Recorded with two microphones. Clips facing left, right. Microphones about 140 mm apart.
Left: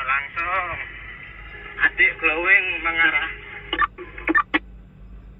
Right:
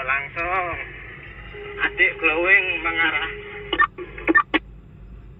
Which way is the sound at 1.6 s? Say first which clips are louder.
Right 1 dB; 20° right (ahead or behind).